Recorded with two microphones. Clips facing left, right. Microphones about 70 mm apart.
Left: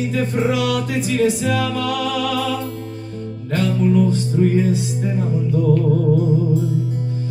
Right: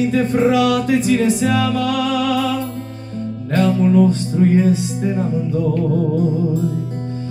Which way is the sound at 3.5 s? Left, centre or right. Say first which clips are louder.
Right 3 dB; right.